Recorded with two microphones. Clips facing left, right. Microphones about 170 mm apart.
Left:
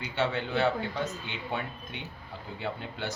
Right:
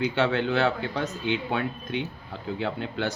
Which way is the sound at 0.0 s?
80° right.